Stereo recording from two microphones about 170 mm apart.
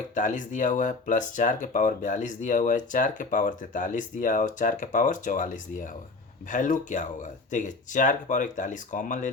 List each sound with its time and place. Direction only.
0.1 s speech: 45° left (ahead or behind)